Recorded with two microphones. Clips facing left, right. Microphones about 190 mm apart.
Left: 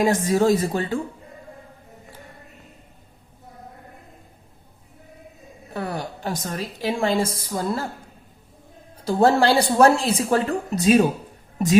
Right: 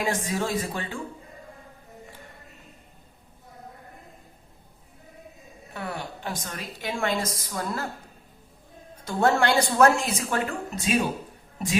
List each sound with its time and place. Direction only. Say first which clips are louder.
0.3 s speech: left 9 dB; 40° left (ahead or behind)
5.7 s a woman's voice: left 5 dB; 40° left (ahead or behind)
9.0 s speech: left 5 dB; 30° left (ahead or behind)